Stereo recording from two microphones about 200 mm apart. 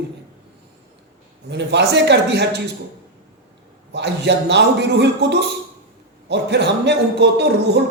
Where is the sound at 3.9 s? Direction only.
60° right (ahead or behind).